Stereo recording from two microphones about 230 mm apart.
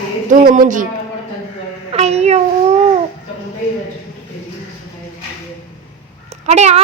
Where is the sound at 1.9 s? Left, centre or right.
Right.